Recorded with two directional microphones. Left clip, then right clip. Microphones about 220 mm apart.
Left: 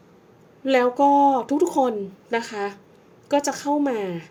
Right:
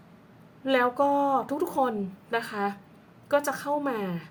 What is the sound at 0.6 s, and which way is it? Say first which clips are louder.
A woman's voice: left 6 dB; 20° left (ahead or behind).